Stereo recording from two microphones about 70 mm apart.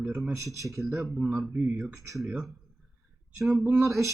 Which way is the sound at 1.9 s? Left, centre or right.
Right.